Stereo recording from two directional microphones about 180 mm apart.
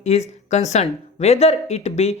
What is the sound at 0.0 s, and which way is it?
A woman's voice, 40° left (ahead or behind).